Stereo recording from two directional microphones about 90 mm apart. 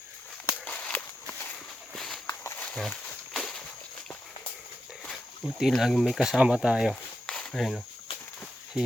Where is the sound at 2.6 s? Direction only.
15° left (ahead or behind).